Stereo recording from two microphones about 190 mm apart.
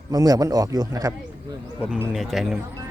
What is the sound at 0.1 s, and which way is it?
A man's voice, 20° right (ahead or behind).